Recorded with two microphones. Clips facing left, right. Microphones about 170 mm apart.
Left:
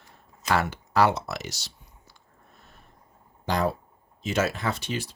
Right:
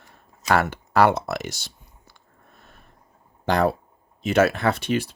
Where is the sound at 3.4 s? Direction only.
65° right (ahead or behind).